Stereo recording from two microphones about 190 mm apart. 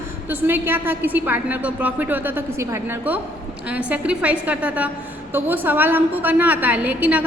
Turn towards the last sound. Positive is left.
turn(degrees=-10)  # may be behind; listen again after turning